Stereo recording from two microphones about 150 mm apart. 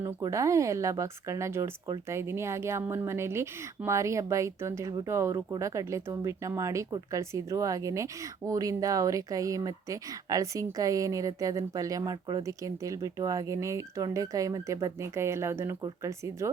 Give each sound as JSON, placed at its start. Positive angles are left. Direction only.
{"t": 0.0, "sound": "speech", "side_deg": -20}